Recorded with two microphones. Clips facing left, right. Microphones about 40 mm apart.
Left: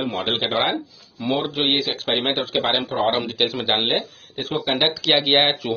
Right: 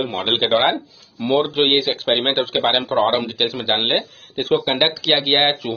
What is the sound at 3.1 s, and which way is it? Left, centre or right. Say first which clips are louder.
Speech: right 2 dB; centre.